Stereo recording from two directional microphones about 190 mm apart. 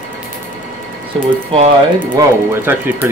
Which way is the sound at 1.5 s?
30° right (ahead or behind).